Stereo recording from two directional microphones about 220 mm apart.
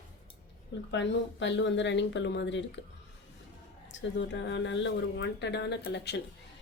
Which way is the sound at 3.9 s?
55° left (ahead or behind).